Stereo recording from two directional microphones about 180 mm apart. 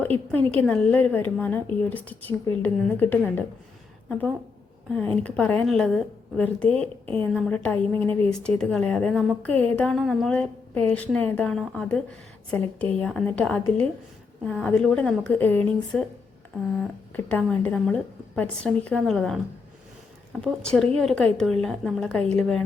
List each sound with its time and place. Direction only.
0.0 s a woman's voice: 10° left (ahead or behind)
4.9 s a woman's voice: 5° left (ahead or behind)
7.0 s speech: 30° right (ahead or behind)
7.3 s a woman's voice: 5° left (ahead or behind)
20.4 s a woman's voice: 5° left (ahead or behind)